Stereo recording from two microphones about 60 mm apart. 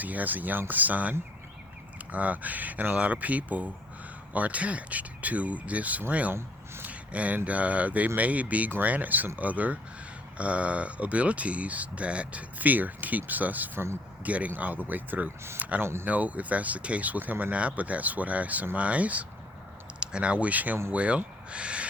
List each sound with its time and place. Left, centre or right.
0.0 s speech: right
2.1 s speech: right
15.8 s speech: right
16.0 s speech: right
21.5 s owl: centre